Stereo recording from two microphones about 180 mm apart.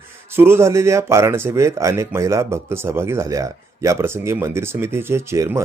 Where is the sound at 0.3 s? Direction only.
15° right (ahead or behind).